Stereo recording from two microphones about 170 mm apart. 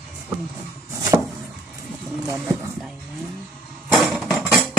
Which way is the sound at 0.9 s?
20° right (ahead or behind).